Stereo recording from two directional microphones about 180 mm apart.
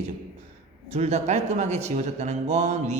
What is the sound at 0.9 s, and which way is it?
A man's voice, 35° right (ahead or behind).